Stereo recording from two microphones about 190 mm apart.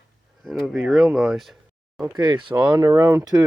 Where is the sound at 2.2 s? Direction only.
25° right (ahead or behind).